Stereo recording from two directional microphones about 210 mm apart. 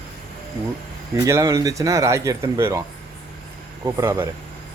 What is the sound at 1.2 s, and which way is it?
Speech, 15° right (ahead or behind).